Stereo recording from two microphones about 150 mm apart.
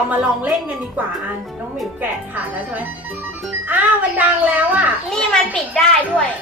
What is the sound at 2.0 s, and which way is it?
Speech, 10° right (ahead or behind).